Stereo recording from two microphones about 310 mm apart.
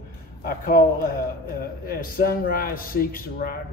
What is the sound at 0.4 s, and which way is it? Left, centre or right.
A man's voice, left.